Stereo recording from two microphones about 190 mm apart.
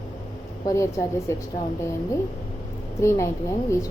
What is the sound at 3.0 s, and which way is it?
Speech, 15° left (ahead or behind).